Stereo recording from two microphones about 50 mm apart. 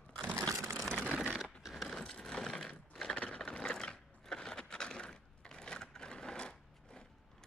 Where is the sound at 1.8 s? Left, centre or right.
Centre.